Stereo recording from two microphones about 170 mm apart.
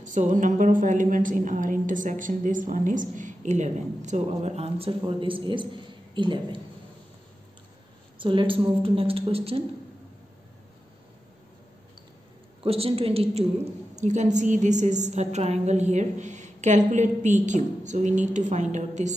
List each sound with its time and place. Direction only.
0.1 s a woman's voice: 45° right (ahead or behind); by 6.6 s 30° right (ahead or behind)
8.2 s a woman's voice: 30° right (ahead or behind)
12.6 s a woman's voice: 35° right (ahead or behind)